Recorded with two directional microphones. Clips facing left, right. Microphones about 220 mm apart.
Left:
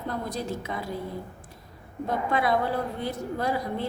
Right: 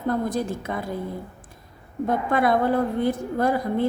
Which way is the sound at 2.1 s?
50° right (ahead or behind).